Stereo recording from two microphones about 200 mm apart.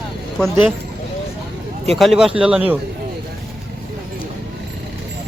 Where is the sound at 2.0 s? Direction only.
Centre (ahead or behind).